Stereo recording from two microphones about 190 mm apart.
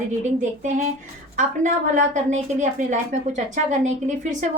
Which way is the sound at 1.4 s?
40° right (ahead or behind).